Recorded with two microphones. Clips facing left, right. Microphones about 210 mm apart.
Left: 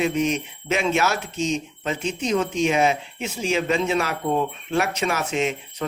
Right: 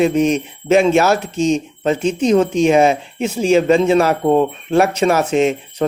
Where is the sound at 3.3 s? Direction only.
35° right (ahead or behind).